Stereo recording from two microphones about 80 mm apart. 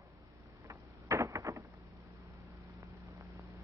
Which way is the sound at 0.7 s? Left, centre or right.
Right.